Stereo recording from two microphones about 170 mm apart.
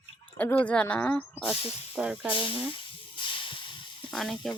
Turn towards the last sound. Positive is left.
turn(degrees=0)  # may be behind; listen again after turning